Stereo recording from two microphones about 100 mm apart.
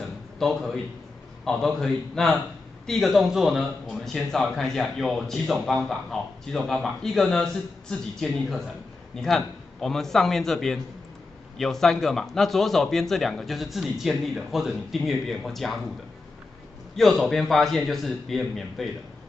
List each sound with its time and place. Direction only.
1.4 s a man's voice: 5° left (ahead or behind)
16.9 s a man's voice: centre (ahead or behind)